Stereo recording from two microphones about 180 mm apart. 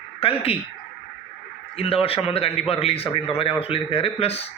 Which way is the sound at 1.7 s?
35° left (ahead or behind).